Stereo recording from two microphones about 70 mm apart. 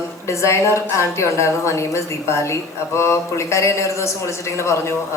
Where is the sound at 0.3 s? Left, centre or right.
Left.